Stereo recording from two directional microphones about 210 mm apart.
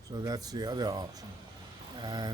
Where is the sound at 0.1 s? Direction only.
20° right (ahead or behind).